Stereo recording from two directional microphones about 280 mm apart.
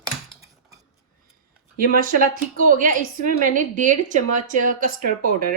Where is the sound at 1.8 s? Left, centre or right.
Right.